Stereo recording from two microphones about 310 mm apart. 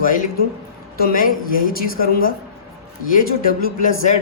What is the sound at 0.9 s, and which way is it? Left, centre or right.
A woman's voice, left.